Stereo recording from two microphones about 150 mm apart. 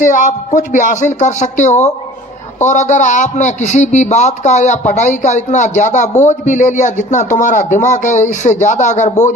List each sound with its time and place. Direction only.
0.0 s a man's voice: 60° left (ahead or behind)